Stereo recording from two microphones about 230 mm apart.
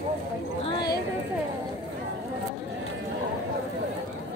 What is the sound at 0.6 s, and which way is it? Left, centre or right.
Speech, left.